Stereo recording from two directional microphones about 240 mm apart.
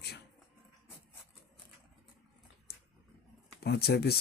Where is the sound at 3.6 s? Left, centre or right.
Left.